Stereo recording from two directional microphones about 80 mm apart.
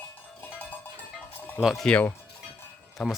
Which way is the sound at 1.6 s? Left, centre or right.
Centre.